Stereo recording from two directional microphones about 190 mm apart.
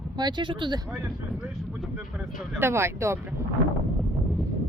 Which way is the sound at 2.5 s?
15° right (ahead or behind).